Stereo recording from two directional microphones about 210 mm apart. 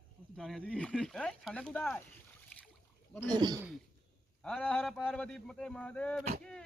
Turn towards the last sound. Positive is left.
turn(degrees=5)  # may be behind; listen again after turning